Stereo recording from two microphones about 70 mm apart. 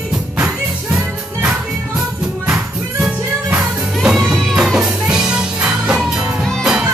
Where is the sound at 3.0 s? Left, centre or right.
Centre.